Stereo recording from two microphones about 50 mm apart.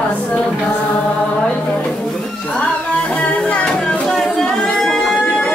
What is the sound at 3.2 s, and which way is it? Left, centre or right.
Music, left.